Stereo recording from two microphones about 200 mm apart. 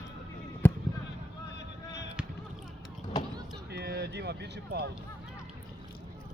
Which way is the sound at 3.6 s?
55° right (ahead or behind).